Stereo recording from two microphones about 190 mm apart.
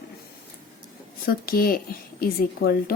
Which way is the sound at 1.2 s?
50° left (ahead or behind).